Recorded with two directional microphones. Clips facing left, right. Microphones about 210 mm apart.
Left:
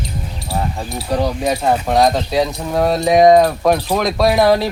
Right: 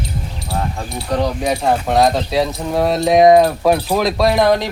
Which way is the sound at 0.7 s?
5° left (ahead or behind).